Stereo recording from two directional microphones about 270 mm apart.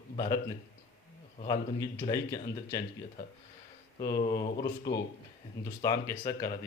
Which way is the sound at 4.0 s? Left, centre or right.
Left.